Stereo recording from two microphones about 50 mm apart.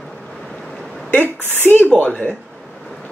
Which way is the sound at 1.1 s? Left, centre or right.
Left.